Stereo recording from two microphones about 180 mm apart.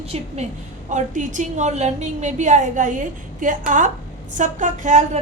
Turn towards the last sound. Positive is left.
turn(degrees=-40)  # may be behind; listen again after turning